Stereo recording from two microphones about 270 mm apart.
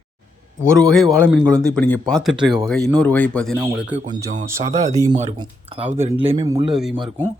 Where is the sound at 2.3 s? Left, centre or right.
Centre.